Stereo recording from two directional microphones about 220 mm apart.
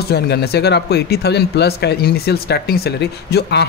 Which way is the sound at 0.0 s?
45° left (ahead or behind).